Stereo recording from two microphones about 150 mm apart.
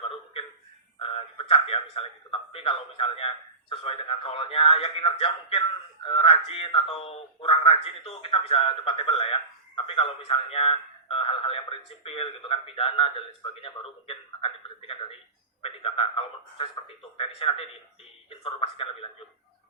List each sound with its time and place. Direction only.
0.9 s a man's voice: 40° left (ahead or behind)